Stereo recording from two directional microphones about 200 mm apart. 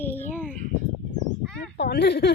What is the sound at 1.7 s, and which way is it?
Speech, 55° left (ahead or behind).